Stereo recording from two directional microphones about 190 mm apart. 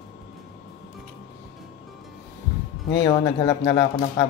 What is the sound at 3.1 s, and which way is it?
Speech, 20° left (ahead or behind).